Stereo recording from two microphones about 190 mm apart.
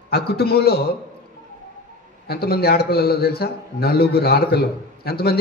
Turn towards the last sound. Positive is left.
turn(degrees=55)  # may be behind; listen again after turning